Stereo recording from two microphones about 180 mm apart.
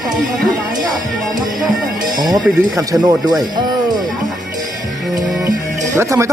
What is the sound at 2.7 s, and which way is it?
Speech, 20° right (ahead or behind).